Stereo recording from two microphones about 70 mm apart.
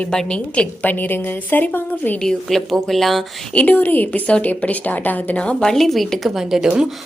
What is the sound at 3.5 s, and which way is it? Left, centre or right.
A woman's voice, left.